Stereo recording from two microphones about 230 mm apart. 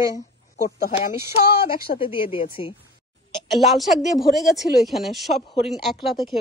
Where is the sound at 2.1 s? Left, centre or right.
Left.